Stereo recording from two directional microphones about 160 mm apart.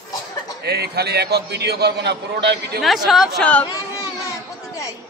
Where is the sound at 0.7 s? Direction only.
90° right.